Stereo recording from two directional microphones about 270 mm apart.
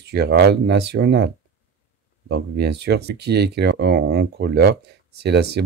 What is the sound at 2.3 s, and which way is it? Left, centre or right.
Speech, right.